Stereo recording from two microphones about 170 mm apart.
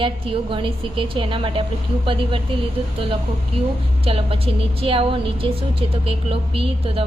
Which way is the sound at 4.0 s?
35° right (ahead or behind).